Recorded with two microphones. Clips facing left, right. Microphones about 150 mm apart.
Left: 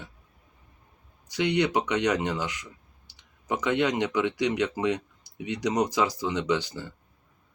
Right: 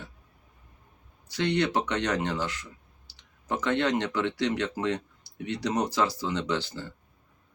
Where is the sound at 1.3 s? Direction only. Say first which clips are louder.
Left 2 dB; 15° left (ahead or behind).